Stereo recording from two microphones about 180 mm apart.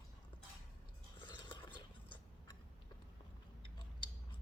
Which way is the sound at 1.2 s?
25° left (ahead or behind).